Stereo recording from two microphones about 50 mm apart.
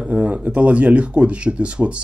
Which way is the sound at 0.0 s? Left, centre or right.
Right.